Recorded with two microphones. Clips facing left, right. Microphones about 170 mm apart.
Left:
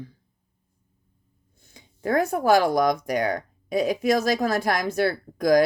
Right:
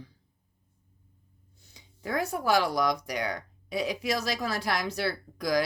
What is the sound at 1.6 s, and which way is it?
Speech, 50° left (ahead or behind).